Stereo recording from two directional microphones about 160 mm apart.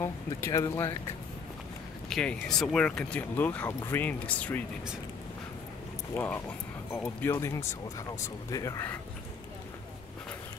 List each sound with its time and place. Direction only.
0.0 s speech: 20° left (ahead or behind)
2.0 s speech: centre (ahead or behind)
6.1 s speech: 15° left (ahead or behind)